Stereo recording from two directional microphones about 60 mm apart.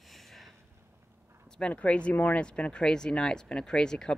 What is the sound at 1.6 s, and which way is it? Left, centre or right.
Speech, left.